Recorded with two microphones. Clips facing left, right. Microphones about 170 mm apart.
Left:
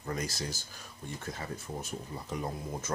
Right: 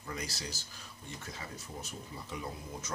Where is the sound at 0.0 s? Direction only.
45° left (ahead or behind).